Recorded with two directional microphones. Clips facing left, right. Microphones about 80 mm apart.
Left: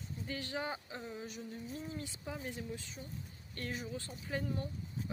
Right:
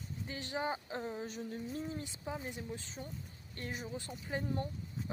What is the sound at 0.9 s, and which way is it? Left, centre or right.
Speech, right.